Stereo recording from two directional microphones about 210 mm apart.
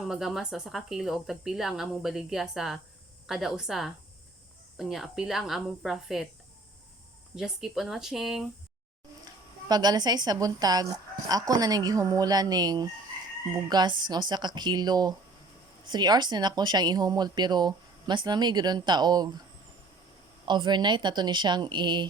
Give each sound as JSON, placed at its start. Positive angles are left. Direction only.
{"t": 0.0, "sound": "speech", "side_deg": 0}
{"t": 7.3, "sound": "speech", "side_deg": 0}
{"t": 9.2, "sound": "speech", "side_deg": -20}
{"t": 20.4, "sound": "speech", "side_deg": -20}